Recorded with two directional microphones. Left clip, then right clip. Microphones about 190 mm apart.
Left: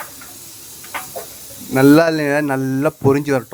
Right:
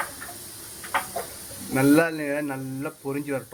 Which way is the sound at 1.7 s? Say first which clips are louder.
Left 9 dB; 40° left (ahead or behind).